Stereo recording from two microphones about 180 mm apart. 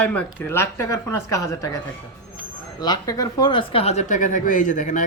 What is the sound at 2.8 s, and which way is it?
A man's voice, 20° left (ahead or behind).